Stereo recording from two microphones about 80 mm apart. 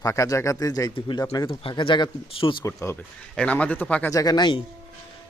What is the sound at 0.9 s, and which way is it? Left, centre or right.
Speech, left.